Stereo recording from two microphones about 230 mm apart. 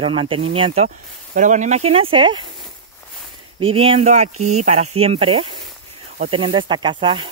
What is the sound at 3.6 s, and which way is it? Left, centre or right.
Speech, right.